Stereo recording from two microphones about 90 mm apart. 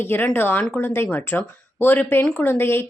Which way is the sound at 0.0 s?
25° left (ahead or behind).